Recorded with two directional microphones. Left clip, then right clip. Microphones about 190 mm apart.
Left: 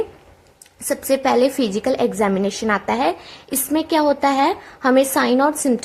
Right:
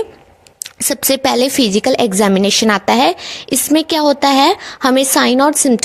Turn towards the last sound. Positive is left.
turn(degrees=-40)  # may be behind; listen again after turning